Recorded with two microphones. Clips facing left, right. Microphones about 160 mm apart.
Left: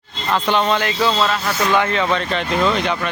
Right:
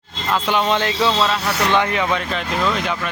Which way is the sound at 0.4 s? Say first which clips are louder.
Left 1 dB; 10° right (ahead or behind).